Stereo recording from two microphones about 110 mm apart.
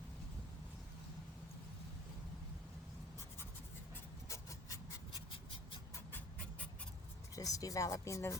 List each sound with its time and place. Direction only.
4.3 s rub: 30° left (ahead or behind)
7.3 s speech: 30° left (ahead or behind)